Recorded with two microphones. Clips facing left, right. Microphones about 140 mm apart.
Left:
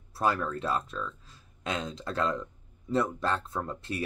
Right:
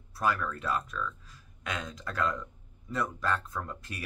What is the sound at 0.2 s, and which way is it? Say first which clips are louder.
Speech: left 2 dB; 30° left (ahead or behind).